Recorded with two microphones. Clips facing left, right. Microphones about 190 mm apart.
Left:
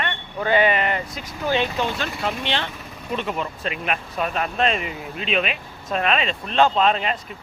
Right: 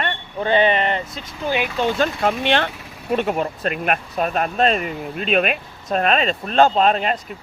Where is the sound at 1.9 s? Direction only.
50° right (ahead or behind).